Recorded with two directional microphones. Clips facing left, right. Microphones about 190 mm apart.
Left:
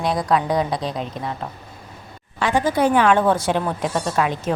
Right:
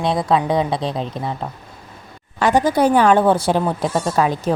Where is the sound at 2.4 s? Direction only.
40° right (ahead or behind).